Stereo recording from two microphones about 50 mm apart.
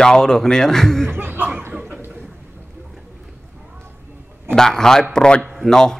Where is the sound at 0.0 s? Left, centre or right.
Centre.